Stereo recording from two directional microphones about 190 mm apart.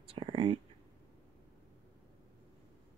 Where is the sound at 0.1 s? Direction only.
30° right (ahead or behind).